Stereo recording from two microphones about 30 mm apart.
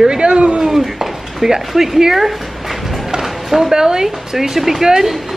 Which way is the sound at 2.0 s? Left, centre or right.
Centre.